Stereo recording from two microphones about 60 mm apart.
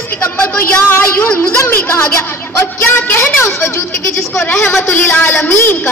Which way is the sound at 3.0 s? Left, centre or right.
Left.